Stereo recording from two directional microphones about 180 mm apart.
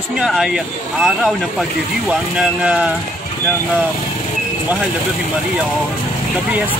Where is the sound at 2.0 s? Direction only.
5° right (ahead or behind).